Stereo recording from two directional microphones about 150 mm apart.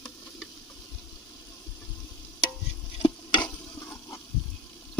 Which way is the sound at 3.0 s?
25° left (ahead or behind).